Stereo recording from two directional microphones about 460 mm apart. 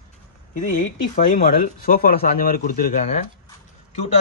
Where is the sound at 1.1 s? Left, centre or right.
Centre.